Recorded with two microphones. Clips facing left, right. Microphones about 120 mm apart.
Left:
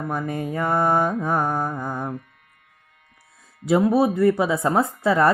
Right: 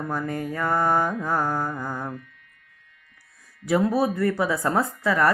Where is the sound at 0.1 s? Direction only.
20° left (ahead or behind).